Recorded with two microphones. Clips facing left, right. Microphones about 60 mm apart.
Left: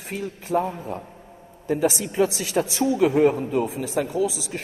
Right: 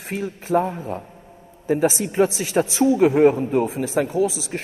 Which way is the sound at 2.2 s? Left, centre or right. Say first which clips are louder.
Right 3 dB; right.